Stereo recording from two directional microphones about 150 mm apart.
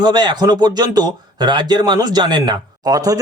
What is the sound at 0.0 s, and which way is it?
Speech, 30° right (ahead or behind).